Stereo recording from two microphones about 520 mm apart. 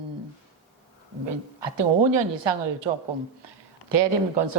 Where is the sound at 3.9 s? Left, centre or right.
Right.